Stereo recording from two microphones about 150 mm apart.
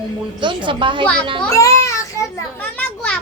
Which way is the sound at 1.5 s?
20° left (ahead or behind).